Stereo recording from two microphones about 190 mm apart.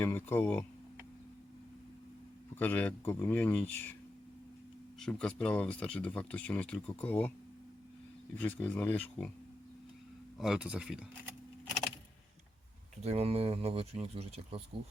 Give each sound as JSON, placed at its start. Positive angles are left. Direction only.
{"t": 0.0, "sound": "speech", "side_deg": 10}
{"t": 2.6, "sound": "speech", "side_deg": 10}
{"t": 4.9, "sound": "speech", "side_deg": 5}
{"t": 8.4, "sound": "speech", "side_deg": 10}
{"t": 10.3, "sound": "speech", "side_deg": -5}
{"t": 13.0, "sound": "speech", "side_deg": -35}